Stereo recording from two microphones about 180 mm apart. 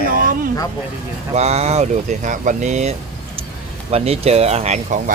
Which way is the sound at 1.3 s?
35° right (ahead or behind).